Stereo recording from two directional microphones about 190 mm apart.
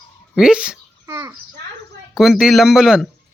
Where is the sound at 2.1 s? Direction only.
Centre (ahead or behind).